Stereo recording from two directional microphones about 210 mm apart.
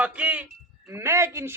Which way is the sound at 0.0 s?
5° right (ahead or behind).